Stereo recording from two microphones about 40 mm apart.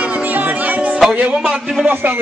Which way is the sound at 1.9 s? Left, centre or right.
Right.